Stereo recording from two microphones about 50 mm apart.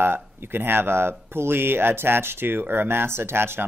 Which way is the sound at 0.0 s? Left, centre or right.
Right.